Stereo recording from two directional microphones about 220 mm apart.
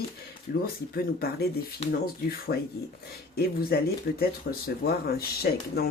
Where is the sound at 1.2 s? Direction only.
45° left (ahead or behind).